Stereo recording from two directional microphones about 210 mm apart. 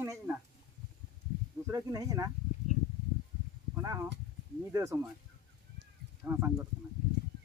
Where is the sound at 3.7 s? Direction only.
15° right (ahead or behind).